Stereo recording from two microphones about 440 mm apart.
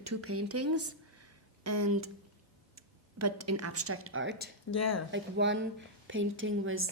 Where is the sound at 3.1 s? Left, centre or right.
Right.